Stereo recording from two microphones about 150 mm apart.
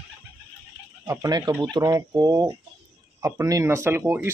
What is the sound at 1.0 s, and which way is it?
A man's voice, 20° right (ahead or behind).